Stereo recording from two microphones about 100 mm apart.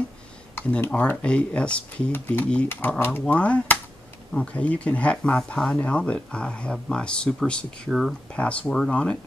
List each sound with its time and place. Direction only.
0.6 s speech: 20° left (ahead or behind)